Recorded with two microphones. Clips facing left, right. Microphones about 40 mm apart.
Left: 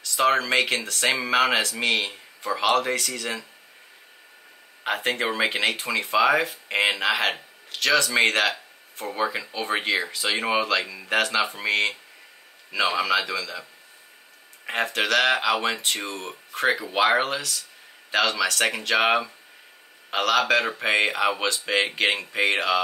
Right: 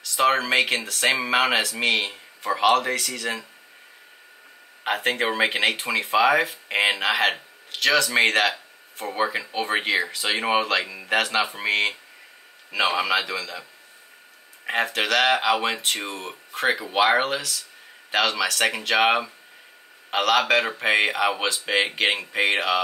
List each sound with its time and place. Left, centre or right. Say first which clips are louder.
0.0 s speech: right 1 dB; centre
4.8 s speech: right 2 dB; centre
11.1 s speech: even; centre
14.7 s speech: right 1 dB; centre